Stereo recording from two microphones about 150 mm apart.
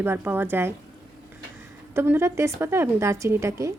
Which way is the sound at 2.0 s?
15° right (ahead or behind).